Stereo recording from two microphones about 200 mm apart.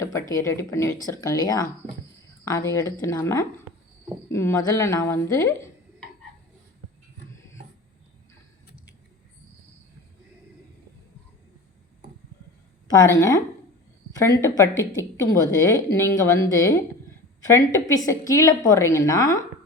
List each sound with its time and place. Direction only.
0.0 s a woman's voice: 15° left (ahead or behind)
13.1 s a woman's voice: 15° left (ahead or behind)